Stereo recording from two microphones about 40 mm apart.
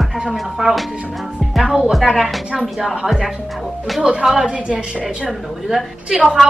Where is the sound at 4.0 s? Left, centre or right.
Centre.